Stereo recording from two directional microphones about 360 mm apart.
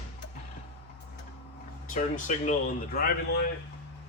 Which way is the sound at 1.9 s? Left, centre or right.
Left.